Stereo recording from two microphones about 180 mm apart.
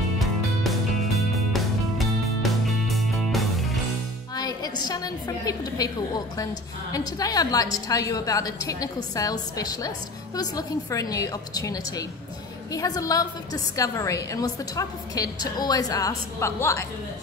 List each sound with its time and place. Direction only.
0.2 s music: centre (ahead or behind)
4.4 s a woman's voice: 20° left (ahead or behind)